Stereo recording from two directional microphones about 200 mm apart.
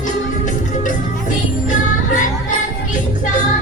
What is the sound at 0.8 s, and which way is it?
Music, 40° left (ahead or behind).